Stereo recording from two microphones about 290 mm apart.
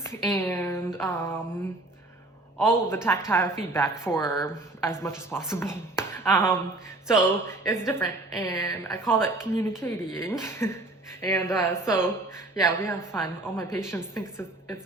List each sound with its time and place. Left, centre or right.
0.0 s a woman's voice: centre
2.6 s a woman's voice: centre